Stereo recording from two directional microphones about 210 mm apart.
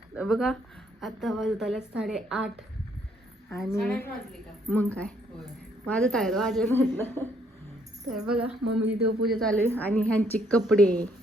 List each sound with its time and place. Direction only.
0.1 s a woman's voice: centre (ahead or behind)
3.5 s a woman's voice: 10° left (ahead or behind)
8.1 s a woman's voice: 5° right (ahead or behind)
8.6 s speech: 55° right (ahead or behind)
9.2 s a woman's voice: centre (ahead or behind)